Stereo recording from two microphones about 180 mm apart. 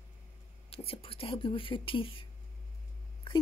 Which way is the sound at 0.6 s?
30° left (ahead or behind).